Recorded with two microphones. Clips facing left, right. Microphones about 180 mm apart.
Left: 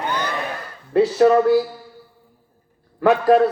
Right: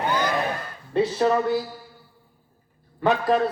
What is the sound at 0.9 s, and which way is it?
Speech, 60° left (ahead or behind).